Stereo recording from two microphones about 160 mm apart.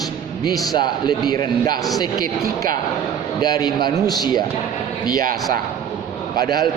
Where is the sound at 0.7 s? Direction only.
25° left (ahead or behind).